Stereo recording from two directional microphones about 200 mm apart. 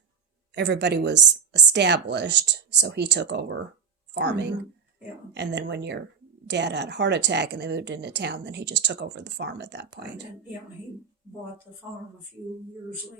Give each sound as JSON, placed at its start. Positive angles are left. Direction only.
{"t": 0.5, "sound": "speech", "side_deg": -60}